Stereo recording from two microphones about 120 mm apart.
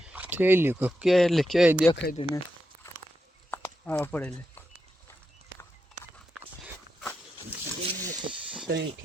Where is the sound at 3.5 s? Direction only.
15° left (ahead or behind).